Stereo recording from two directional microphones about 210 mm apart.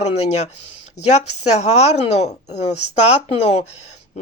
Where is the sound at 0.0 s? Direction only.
30° left (ahead or behind).